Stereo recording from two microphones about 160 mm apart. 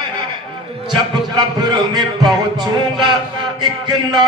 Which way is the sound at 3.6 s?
25° right (ahead or behind).